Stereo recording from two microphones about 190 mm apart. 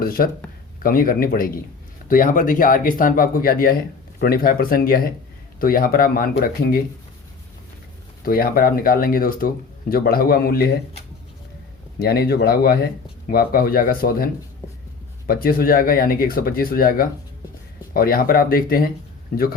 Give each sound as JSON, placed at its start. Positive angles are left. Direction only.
{"t": 0.0, "sound": "speech", "side_deg": 50}
{"t": 8.2, "sound": "speech", "side_deg": 50}
{"t": 11.9, "sound": "speech", "side_deg": 55}
{"t": 15.3, "sound": "speech", "side_deg": 50}